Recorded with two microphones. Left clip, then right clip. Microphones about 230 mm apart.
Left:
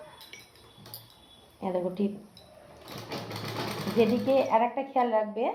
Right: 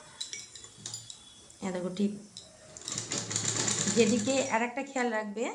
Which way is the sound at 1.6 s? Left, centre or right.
Right.